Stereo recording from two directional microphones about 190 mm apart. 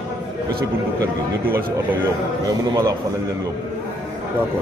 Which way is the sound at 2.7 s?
20° right (ahead or behind).